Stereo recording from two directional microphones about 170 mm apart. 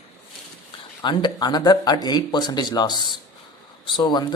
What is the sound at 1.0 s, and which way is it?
Speech, 25° left (ahead or behind).